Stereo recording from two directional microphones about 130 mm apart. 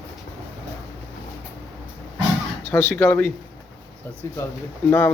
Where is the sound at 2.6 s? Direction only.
15° left (ahead or behind).